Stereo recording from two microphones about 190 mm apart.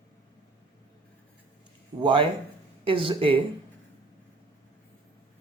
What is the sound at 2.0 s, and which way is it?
Speech, 25° right (ahead or behind).